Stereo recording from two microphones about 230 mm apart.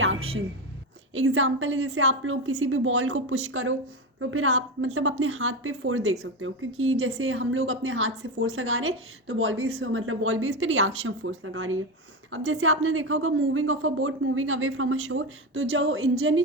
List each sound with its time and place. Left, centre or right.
0.0 s music: right
1.1 s a woman's voice: right